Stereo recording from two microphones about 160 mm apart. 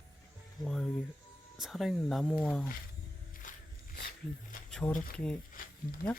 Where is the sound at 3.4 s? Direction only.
55° left (ahead or behind).